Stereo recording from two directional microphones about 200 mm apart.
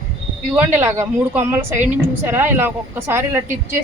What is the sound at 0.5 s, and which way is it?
A woman's voice, 10° right (ahead or behind).